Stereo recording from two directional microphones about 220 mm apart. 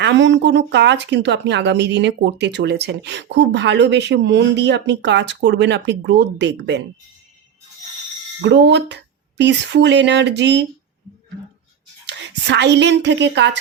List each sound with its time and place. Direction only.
0.0 s speech: 55° right (ahead or behind)
8.4 s speech: 50° right (ahead or behind)
12.0 s speech: 50° right (ahead or behind)